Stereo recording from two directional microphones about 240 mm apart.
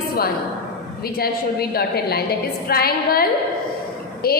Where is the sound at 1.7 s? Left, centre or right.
Left.